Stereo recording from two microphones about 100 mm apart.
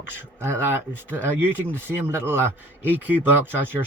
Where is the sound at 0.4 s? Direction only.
25° right (ahead or behind).